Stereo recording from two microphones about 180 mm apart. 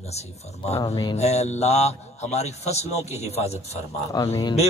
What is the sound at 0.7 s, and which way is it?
Speech, 20° left (ahead or behind).